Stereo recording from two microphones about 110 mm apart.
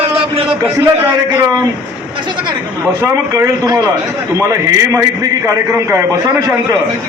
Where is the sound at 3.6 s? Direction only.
35° right (ahead or behind).